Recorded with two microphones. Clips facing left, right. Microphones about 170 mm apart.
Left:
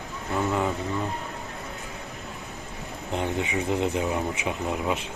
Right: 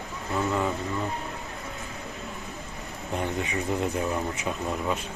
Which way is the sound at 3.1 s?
20° left (ahead or behind).